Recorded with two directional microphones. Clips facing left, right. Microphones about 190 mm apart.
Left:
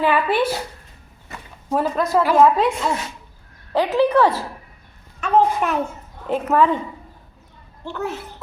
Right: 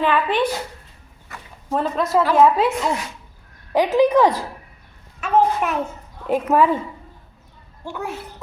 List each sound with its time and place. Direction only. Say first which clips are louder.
0.0 s a child's voice: left 1 dB; 10° left (ahead or behind)
1.3 s a sound: left 2 dB; 20° left (ahead or behind)
1.7 s a woman's voice: left 1 dB; centre (ahead or behind); by 4.4 s 15° right (ahead or behind)
5.2 s a woman's voice: left 1 dB; 5° right (ahead or behind)
7.9 s a woman's voice: left 2 dB; 10° right (ahead or behind)